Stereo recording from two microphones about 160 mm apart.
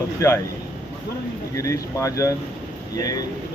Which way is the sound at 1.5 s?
20° left (ahead or behind).